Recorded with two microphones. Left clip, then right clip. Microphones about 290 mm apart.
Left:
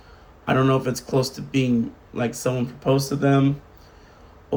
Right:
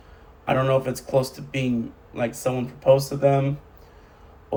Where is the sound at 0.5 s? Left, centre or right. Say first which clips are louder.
Even; centre.